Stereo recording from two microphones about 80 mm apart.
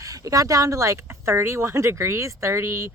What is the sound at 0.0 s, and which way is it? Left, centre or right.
Speech, right.